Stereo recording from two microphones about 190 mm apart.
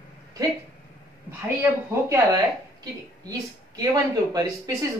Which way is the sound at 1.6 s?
20° right (ahead or behind).